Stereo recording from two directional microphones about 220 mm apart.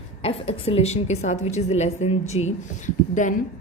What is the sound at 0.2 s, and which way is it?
Speech, 25° left (ahead or behind).